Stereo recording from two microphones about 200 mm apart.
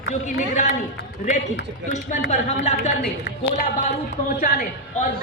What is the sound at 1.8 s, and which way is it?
A woman's voice, 35° left (ahead or behind).